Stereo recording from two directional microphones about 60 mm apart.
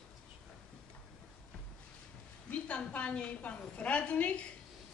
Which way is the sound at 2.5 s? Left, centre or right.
Left.